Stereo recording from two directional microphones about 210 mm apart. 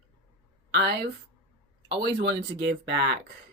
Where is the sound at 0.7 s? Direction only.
55° right (ahead or behind).